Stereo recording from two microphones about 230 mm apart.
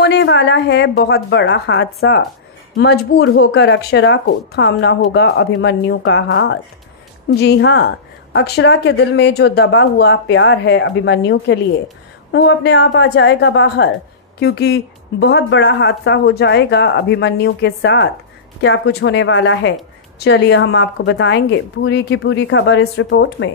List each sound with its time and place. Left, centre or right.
0.0 s a woman's voice: left
7.3 s a woman's voice: left